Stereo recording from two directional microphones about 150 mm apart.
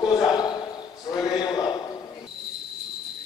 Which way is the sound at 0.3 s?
30° left (ahead or behind).